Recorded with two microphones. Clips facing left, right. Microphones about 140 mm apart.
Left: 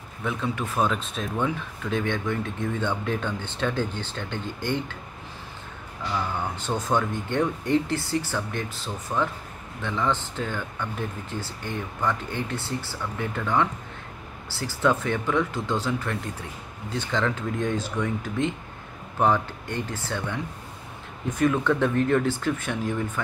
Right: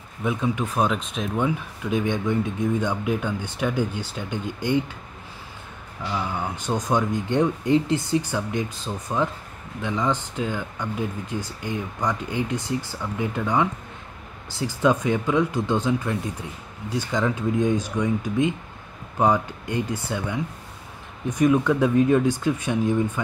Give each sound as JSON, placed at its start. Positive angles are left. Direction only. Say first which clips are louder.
{"t": 0.2, "sound": "speech", "louder": "right 4 dB", "side_deg": -15}
{"t": 6.1, "sound": "speech", "louder": "right 1 dB", "side_deg": -10}